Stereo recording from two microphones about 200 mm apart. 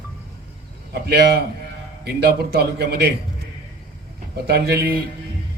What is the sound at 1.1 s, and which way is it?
A man's voice, 50° right (ahead or behind).